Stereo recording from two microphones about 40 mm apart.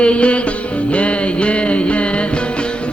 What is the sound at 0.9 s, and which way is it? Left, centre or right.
Music, left.